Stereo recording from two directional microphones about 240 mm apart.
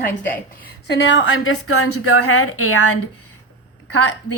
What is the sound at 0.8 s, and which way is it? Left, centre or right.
A woman's voice, left.